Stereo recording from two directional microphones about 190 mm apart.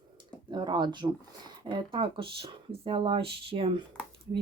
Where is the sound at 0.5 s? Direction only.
25° right (ahead or behind).